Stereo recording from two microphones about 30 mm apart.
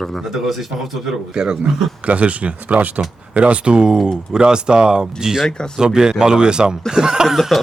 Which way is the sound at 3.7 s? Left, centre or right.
Right.